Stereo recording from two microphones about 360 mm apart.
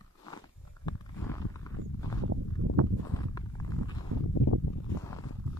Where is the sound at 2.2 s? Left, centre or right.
Right.